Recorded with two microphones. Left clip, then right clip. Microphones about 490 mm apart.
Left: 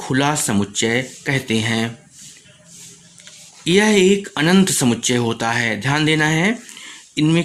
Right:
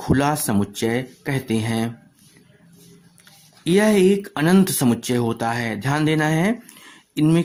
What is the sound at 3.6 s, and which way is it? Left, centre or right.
Speech, right.